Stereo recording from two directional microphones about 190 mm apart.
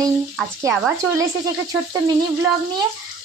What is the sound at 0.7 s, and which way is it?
Speech, 10° right (ahead or behind).